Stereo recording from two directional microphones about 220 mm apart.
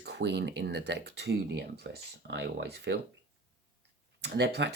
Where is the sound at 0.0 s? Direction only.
50° right (ahead or behind).